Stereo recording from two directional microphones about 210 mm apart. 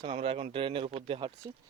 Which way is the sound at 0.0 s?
30° right (ahead or behind).